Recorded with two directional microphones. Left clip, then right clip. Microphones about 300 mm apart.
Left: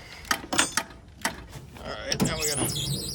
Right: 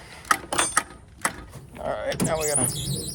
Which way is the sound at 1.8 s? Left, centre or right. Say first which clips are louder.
Right 8 dB; centre.